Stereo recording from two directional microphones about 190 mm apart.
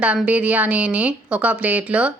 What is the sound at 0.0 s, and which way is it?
A woman's voice, 5° right (ahead or behind).